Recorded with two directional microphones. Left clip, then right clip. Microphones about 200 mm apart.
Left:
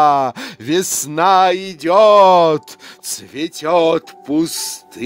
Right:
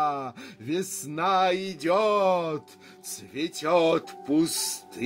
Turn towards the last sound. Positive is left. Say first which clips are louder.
# left 7 dB
turn(degrees=50)  # may be behind; listen again after turning